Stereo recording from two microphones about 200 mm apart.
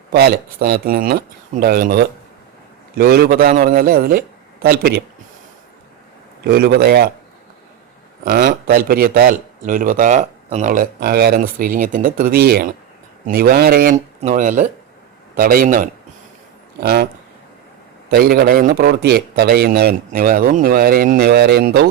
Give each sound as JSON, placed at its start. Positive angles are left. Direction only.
{"t": 0.1, "sound": "speech", "side_deg": -50}
{"t": 6.4, "sound": "speech", "side_deg": -55}
{"t": 8.2, "sound": "speech", "side_deg": -45}
{"t": 18.1, "sound": "speech", "side_deg": -50}